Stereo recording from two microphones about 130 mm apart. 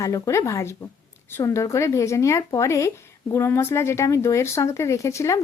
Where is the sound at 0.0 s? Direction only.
25° left (ahead or behind).